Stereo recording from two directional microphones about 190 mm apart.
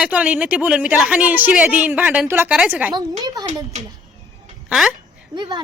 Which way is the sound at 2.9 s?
20° right (ahead or behind).